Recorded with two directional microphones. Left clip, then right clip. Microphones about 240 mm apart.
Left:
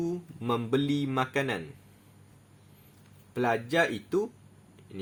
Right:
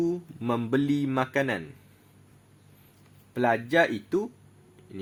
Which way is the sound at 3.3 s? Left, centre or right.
Right.